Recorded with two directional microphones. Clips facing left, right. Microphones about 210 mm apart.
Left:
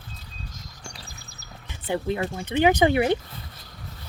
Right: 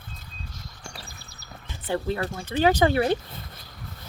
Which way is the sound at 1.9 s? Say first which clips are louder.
Left 1 dB; 15° left (ahead or behind).